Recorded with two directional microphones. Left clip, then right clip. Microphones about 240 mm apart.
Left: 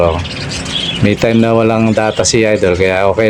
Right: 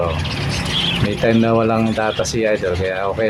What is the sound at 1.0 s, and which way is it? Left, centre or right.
Speech, left.